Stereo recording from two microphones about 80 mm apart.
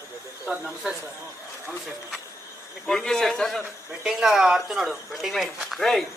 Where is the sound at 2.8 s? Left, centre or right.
Centre.